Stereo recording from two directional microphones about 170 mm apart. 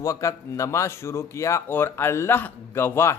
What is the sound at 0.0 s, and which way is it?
Speech, 20° left (ahead or behind).